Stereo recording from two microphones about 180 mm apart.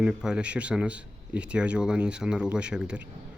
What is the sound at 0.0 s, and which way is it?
Speech, 5° right (ahead or behind).